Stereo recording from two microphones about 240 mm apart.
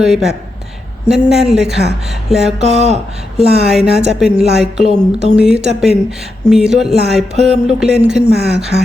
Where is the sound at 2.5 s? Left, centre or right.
Right.